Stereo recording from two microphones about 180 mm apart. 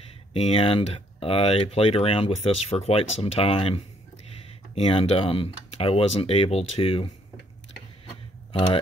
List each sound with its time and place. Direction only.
0.3 s speech: 35° left (ahead or behind)